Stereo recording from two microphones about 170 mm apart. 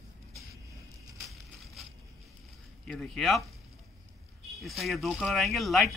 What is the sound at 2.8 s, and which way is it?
Speech, 5° left (ahead or behind).